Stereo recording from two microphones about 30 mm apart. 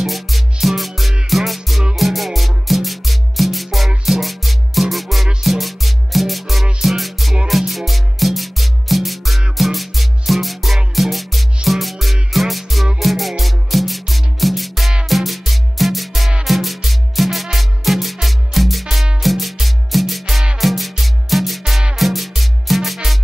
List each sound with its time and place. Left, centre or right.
0.0 s music: centre